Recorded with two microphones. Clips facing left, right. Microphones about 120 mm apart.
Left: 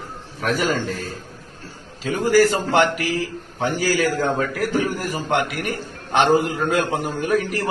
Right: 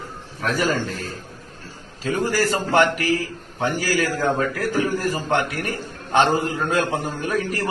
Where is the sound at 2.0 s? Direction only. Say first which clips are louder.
Left 5 dB; 15° left (ahead or behind).